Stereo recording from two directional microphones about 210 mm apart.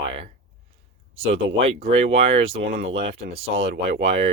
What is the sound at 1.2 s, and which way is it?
Speech, 25° right (ahead or behind).